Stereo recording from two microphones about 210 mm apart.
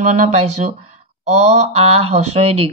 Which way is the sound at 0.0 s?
35° right (ahead or behind).